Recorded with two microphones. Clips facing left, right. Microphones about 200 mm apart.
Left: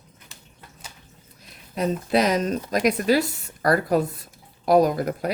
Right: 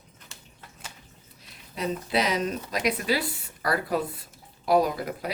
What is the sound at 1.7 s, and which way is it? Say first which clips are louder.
Speech: left 5 dB; 50° left (ahead or behind).